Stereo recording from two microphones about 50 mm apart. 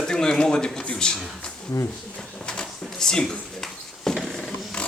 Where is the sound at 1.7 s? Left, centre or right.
Left.